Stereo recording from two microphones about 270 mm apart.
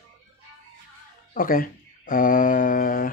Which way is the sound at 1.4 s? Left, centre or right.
Left.